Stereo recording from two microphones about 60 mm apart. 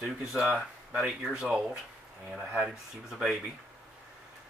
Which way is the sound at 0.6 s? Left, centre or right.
Centre.